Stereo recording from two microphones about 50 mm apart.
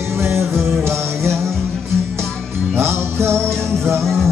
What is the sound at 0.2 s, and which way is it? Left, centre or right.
Music, right.